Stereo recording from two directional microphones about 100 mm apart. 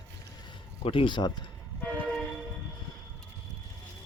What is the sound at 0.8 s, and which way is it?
Speech, 55° left (ahead or behind).